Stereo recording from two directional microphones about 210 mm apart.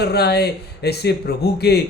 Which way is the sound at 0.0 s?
50° left (ahead or behind).